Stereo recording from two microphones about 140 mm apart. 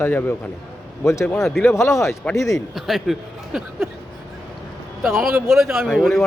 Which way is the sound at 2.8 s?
Centre (ahead or behind).